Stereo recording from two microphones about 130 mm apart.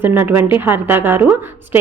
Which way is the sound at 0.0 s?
15° right (ahead or behind).